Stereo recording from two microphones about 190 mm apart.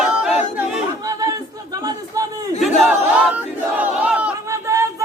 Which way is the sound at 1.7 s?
20° right (ahead or behind).